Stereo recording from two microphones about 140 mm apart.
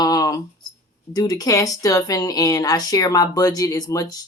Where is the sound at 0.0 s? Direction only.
25° left (ahead or behind).